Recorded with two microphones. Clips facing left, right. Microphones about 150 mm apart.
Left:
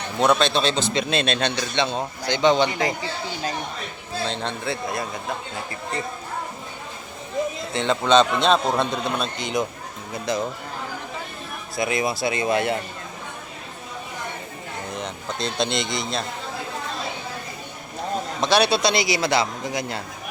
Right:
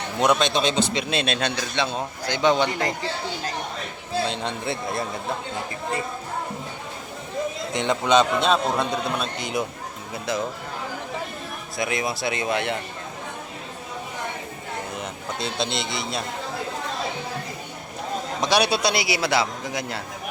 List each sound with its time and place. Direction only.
0.2 s a man's voice: 15° right (ahead or behind)
4.6 s speech: 25° right (ahead or behind)
7.7 s a man's voice: 15° right (ahead or behind)
11.8 s speech: centre (ahead or behind)
14.9 s speech: 5° right (ahead or behind)
18.4 s a man's voice: 10° right (ahead or behind)